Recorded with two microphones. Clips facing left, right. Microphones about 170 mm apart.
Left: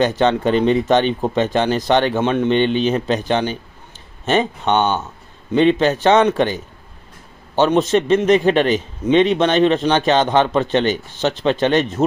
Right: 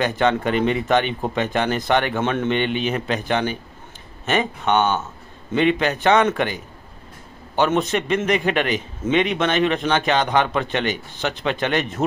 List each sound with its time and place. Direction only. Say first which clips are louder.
0.2 s a man's voice: left 3 dB; 25° left (ahead or behind)